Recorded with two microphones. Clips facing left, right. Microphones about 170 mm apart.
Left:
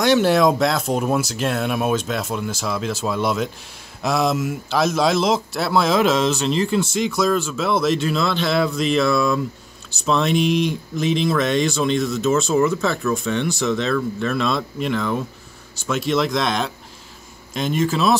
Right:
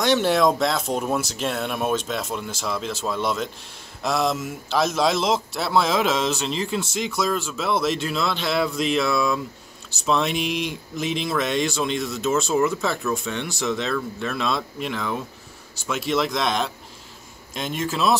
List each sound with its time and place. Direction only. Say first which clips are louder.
0.0 s speech: left 3 dB; 5° left (ahead or behind)